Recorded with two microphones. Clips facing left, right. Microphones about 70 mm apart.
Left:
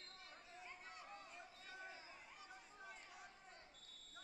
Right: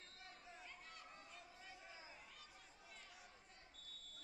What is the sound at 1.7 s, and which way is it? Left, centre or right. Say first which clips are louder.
Chatter: left 7 dB; left.